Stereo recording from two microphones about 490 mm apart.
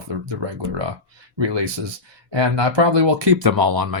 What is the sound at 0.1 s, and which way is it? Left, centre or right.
Speech, right.